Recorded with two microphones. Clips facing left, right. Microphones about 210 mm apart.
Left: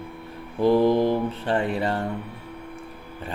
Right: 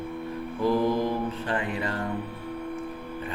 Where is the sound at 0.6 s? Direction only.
30° left (ahead or behind).